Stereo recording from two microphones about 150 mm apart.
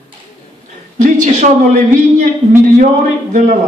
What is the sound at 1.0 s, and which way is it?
A man's voice, 50° right (ahead or behind).